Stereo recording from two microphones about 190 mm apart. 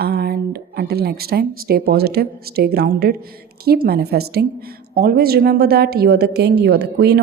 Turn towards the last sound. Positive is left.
turn(degrees=-60)  # may be behind; listen again after turning